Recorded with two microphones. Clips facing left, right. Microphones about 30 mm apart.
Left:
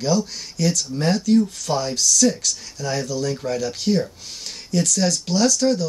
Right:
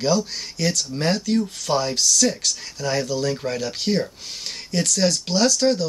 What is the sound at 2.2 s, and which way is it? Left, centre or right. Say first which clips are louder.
Speech: left 5 dB; centre.